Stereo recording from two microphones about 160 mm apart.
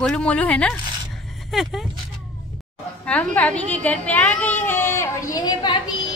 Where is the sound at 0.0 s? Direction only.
5° left (ahead or behind).